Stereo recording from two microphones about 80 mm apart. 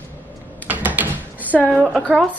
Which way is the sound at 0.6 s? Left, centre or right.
Right.